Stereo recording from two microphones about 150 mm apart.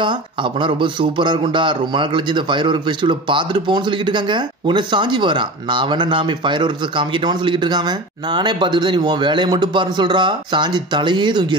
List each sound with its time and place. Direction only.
0.0 s speech: 30° right (ahead or behind)